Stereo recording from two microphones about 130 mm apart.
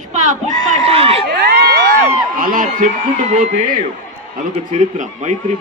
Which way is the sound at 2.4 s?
90° right.